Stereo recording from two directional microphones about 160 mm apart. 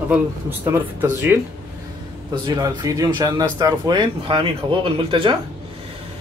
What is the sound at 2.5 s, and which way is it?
Speech, 20° right (ahead or behind).